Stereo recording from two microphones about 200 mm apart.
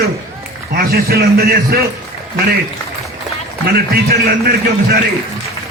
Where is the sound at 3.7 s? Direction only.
50° right (ahead or behind).